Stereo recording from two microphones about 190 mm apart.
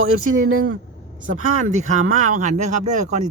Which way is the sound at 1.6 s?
40° right (ahead or behind).